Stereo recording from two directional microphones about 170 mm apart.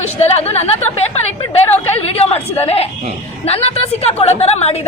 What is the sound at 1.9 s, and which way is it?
A woman's voice, 35° left (ahead or behind).